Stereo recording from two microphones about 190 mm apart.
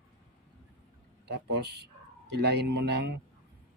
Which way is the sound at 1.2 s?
60° right (ahead or behind).